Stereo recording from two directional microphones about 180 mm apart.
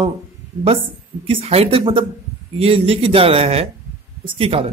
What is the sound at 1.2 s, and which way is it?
Speech, 35° right (ahead or behind).